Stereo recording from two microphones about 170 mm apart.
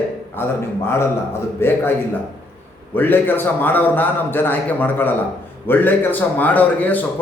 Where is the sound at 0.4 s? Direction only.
10° left (ahead or behind).